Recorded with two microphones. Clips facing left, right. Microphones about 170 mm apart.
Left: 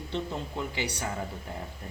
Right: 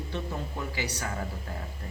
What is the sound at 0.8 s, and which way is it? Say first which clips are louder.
Speech: even; 25° left (ahead or behind).